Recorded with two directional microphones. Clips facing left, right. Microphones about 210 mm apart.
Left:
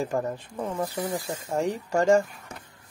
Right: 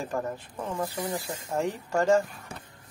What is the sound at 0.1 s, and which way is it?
Speech, 15° left (ahead or behind).